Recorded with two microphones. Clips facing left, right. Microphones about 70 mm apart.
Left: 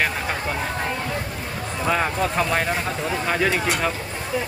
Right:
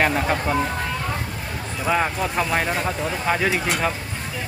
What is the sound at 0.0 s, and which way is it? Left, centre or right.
Speech, centre.